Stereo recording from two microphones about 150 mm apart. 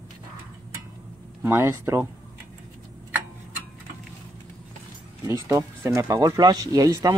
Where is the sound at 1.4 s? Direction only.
15° right (ahead or behind).